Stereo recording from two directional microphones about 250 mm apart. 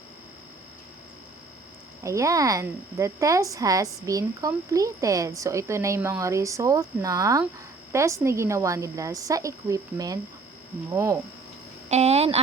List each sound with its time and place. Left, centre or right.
2.0 s speech: centre
11.9 s speech: right